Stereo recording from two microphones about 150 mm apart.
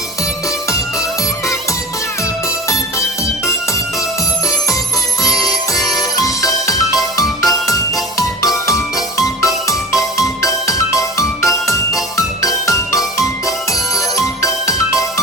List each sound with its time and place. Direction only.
2.6 s music: 20° left (ahead or behind)
5.2 s music: 25° left (ahead or behind)